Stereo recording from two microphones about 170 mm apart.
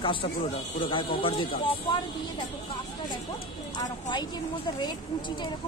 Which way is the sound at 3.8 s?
25° left (ahead or behind).